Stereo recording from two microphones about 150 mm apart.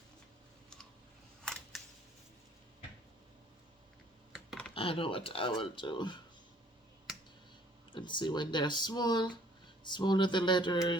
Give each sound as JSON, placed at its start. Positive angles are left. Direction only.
{"t": 1.7, "sound": "camera", "side_deg": 0}
{"t": 4.7, "sound": "speech", "side_deg": 40}
{"t": 7.9, "sound": "speech", "side_deg": 30}